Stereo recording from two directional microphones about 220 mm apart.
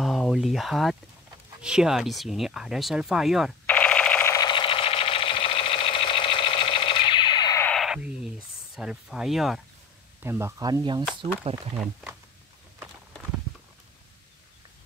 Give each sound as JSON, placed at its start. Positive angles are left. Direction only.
{"t": 0.0, "sound": "speech", "side_deg": 0}
{"t": 1.6, "sound": "a sound", "side_deg": -5}
{"t": 8.7, "sound": "speech", "side_deg": 0}